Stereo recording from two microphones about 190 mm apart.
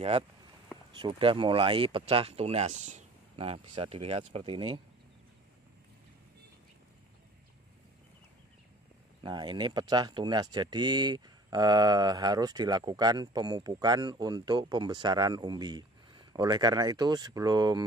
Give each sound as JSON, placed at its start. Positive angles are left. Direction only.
{"t": 0.9, "sound": "speech", "side_deg": -25}
{"t": 9.2, "sound": "speech", "side_deg": -25}